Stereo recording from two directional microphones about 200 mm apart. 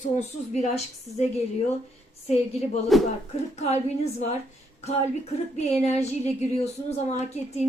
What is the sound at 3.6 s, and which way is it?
Speech, 35° left (ahead or behind).